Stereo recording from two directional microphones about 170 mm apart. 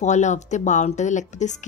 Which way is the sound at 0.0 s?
45° left (ahead or behind).